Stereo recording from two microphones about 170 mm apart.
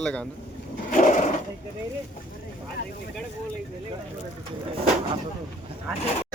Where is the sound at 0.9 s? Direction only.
45° left (ahead or behind).